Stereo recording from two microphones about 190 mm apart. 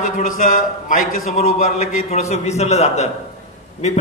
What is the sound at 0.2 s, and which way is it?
A man's voice, 45° left (ahead or behind).